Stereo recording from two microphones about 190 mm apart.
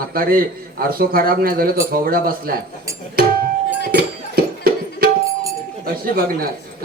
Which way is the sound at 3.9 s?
50° right (ahead or behind).